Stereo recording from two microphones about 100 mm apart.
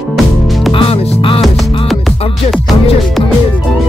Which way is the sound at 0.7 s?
70° left (ahead or behind).